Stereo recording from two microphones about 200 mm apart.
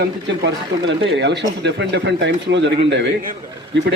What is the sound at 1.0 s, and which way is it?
A man's voice, 60° right (ahead or behind).